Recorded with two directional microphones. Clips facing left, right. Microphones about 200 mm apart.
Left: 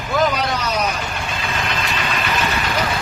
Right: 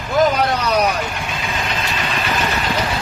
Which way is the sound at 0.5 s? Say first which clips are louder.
Right 4 dB; 60° right (ahead or behind).